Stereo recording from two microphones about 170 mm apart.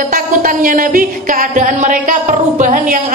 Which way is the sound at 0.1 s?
55° right (ahead or behind).